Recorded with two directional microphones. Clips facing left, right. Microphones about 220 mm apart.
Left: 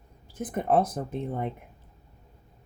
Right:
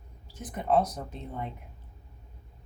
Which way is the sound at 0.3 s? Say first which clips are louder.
Left 2 dB; 50° left (ahead or behind).